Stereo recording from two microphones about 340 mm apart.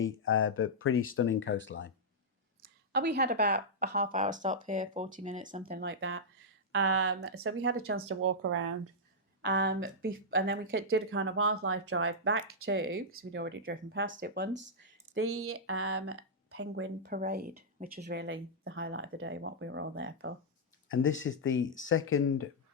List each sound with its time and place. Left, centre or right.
0.0 s speech: left
2.6 s speech: right
20.9 s speech: left